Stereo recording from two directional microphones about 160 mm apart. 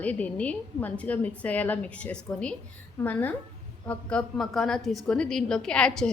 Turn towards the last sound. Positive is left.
turn(degrees=5)  # may be behind; listen again after turning